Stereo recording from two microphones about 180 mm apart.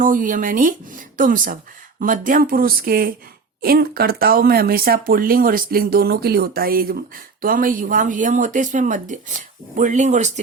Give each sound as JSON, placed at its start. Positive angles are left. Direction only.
{"t": 0.0, "sound": "speech", "side_deg": -50}